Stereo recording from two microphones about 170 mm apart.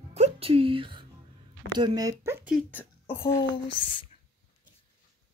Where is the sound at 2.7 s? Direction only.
15° left (ahead or behind).